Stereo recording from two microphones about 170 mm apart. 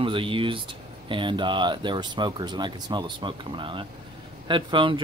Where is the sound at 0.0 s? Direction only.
30° right (ahead or behind).